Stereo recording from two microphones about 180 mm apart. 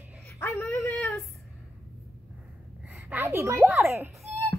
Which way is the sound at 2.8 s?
10° right (ahead or behind).